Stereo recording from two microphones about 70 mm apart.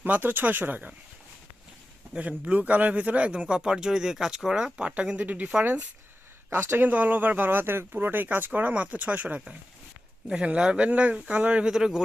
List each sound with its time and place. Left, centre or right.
0.0 s speech: right
2.1 s speech: centre
6.5 s speech: right
6.8 s speech: right
11.6 s speech: centre